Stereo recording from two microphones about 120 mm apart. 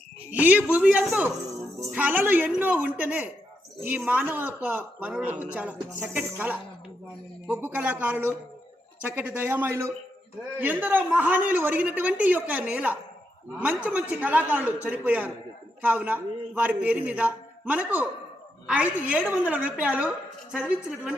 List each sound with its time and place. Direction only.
0.3 s a woman's voice: 15° right (ahead or behind)